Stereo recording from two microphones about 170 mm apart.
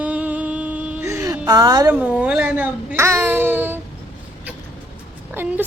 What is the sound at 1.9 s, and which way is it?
A child's voice, 10° right (ahead or behind).